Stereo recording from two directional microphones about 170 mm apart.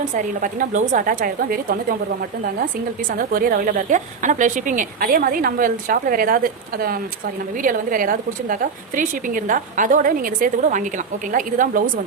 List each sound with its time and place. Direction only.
0.2 s a woman's voice: 50° right (ahead or behind)
3.2 s a woman's voice: 55° right (ahead or behind)